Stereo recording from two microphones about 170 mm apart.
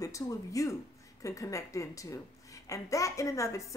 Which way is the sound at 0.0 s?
20° left (ahead or behind).